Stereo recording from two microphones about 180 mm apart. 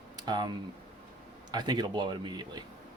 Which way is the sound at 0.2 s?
25° right (ahead or behind).